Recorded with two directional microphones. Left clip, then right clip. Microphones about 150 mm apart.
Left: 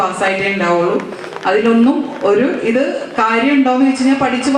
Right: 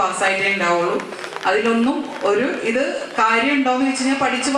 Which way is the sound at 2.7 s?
10° left (ahead or behind).